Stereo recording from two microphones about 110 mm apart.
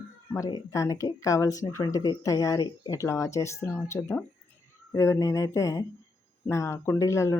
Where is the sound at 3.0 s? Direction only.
30° left (ahead or behind).